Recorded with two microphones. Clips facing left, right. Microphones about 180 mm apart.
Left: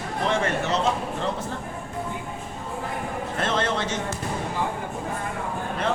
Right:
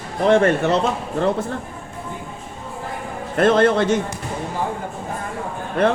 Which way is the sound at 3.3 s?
55° right (ahead or behind).